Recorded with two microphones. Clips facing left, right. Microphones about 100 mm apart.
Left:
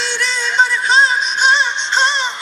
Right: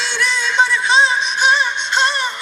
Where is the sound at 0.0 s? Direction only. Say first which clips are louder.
Right 1 dB; 15° left (ahead or behind).